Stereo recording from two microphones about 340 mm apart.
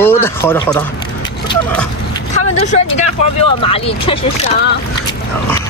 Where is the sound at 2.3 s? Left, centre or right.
Left.